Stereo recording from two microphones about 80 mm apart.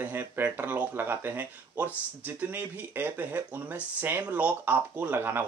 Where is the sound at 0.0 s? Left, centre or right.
Right.